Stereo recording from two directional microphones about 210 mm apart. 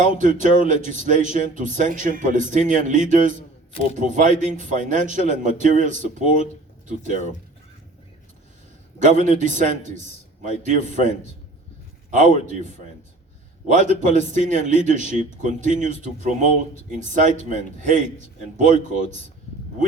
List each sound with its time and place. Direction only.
0.2 s a man's voice: 35° right (ahead or behind)
9.0 s a man's voice: 35° right (ahead or behind)
12.1 s a man's voice: 35° right (ahead or behind)
13.7 s a man's voice: 35° right (ahead or behind)